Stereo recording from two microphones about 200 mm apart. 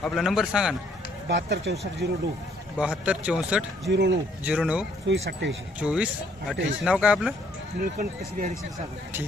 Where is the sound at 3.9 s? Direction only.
60° right (ahead or behind).